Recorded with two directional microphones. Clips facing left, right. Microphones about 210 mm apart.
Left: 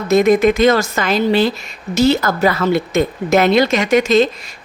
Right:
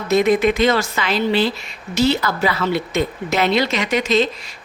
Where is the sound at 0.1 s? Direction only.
45° left (ahead or behind).